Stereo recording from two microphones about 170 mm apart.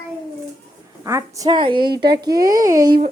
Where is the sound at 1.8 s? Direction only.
70° right (ahead or behind).